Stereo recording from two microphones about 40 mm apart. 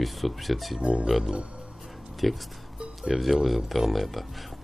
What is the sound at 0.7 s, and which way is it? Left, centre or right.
Speech, right.